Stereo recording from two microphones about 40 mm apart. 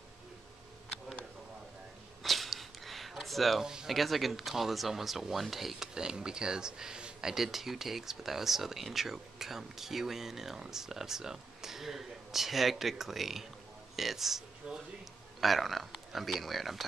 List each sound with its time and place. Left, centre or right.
2.2 s a sound: centre
3.8 s speech: centre
5.9 s speech: centre
7.2 s speech: centre
14.7 s speech: centre
15.4 s speech: centre